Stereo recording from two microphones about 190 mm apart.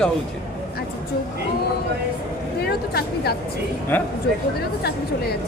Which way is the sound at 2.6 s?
55° left (ahead or behind).